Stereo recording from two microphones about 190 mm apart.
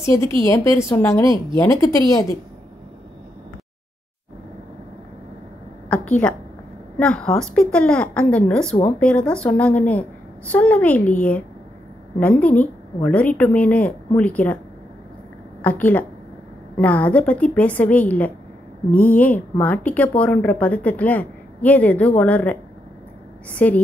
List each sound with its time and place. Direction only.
0.0 s a woman's voice: 15° left (ahead or behind)
1.2 s speech: 25° right (ahead or behind)
1.6 s a woman's voice: 15° left (ahead or behind)
5.9 s a woman's voice: 10° left (ahead or behind)
12.2 s a woman's voice: 10° left (ahead or behind)
15.6 s a woman's voice: 10° left (ahead or behind)